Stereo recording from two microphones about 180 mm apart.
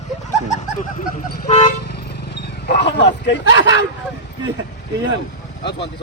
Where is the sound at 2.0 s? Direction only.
65° left (ahead or behind).